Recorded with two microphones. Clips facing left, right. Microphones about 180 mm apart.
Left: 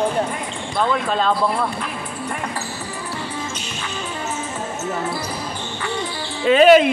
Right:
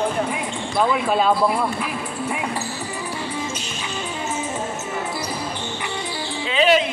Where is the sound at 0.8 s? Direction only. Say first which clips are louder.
Right 1 dB; 5° right (ahead or behind).